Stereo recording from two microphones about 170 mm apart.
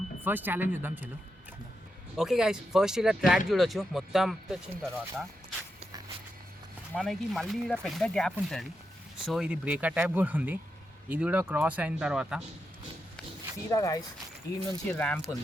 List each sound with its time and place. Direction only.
0.3 s speech: 10° right (ahead or behind)
2.1 s speech: 5° right (ahead or behind)
6.9 s speech: 5° left (ahead or behind)
13.7 s speech: 20° left (ahead or behind)
14.9 s speech: 10° left (ahead or behind)